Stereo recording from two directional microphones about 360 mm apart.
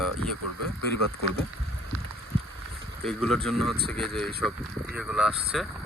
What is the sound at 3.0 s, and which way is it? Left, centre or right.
Speech, centre.